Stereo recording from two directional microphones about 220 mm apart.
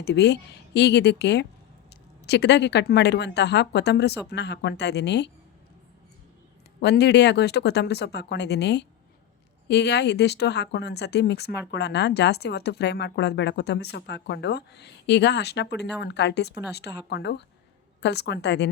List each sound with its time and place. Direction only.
0.0 s speech: 50° left (ahead or behind)
6.7 s speech: 45° left (ahead or behind)